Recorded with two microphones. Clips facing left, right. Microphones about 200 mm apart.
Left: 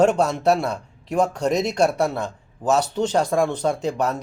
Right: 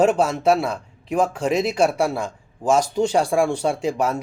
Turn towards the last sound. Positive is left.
turn(degrees=-10)  # may be behind; listen again after turning